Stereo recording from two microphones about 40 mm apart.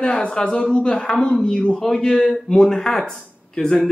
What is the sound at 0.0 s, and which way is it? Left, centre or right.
A man's voice, left.